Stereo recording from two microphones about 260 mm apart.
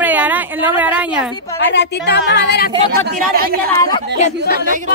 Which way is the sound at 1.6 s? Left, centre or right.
Left.